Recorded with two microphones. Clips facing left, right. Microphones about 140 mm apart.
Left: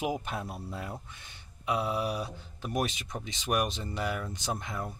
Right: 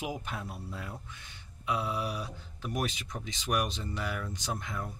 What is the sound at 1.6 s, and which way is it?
Speech, 20° left (ahead or behind).